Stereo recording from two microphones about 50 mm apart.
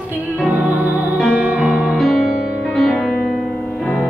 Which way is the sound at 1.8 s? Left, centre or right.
Centre.